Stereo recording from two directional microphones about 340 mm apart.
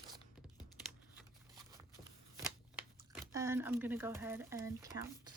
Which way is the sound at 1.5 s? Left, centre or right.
Centre.